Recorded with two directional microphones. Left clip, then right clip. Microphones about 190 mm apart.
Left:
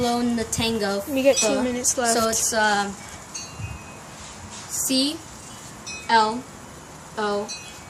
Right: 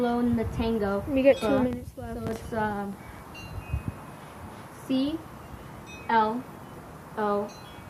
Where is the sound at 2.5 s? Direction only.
25° left (ahead or behind).